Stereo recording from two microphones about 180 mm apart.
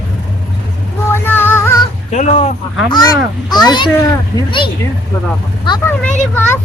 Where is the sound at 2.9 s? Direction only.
20° left (ahead or behind).